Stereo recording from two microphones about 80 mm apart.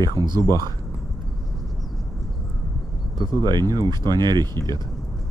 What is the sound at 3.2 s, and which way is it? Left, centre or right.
Speech, right.